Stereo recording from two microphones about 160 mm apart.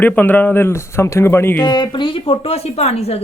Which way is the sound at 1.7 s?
30° left (ahead or behind).